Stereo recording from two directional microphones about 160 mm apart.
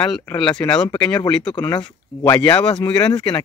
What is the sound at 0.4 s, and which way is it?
Speech, 30° left (ahead or behind).